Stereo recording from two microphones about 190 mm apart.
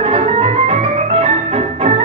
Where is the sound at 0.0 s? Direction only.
30° right (ahead or behind).